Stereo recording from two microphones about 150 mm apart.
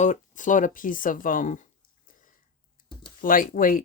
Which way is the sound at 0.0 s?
55° left (ahead or behind).